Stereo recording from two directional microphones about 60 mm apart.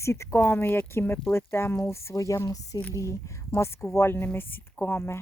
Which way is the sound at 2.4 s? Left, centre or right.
Left.